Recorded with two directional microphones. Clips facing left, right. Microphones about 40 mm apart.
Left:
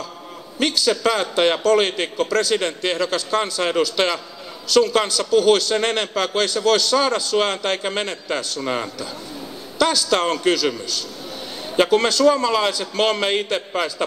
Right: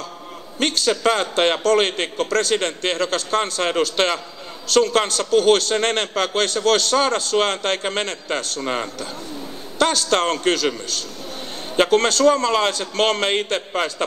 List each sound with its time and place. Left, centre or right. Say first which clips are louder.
0.8 s a man's voice: right 2 dB; right
9.8 s a man's voice: even; right
11.7 s a man's voice: even; right